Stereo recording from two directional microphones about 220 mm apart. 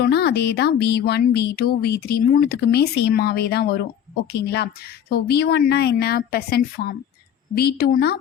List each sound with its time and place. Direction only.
0.0 s speech: 45° left (ahead or behind)